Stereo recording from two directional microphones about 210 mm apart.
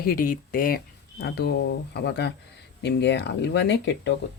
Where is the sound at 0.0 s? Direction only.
45° left (ahead or behind).